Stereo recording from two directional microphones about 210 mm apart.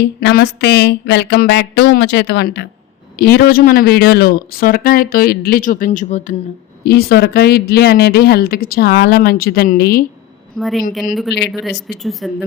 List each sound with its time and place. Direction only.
0.0 s speech: 50° left (ahead or behind); by 6.3 s 35° left (ahead or behind)
6.8 s speech: 50° left (ahead or behind)
10.6 s speech: centre (ahead or behind)